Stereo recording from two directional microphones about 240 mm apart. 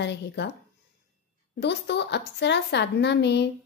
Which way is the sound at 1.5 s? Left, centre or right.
Left.